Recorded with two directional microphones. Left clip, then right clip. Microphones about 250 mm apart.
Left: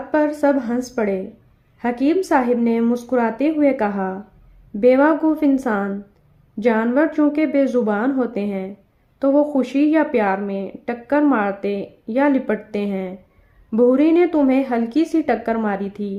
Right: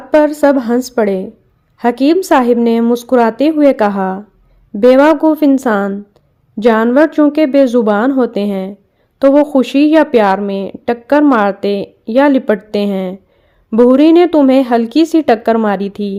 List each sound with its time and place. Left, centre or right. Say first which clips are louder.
0.1 s speech: right 8 dB; right